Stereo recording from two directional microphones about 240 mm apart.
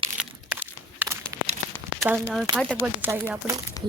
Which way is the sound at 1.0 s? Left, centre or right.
Centre.